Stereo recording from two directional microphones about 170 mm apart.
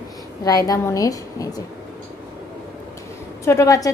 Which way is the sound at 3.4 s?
20° left (ahead or behind).